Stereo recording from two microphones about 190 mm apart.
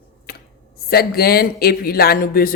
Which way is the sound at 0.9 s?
55° left (ahead or behind).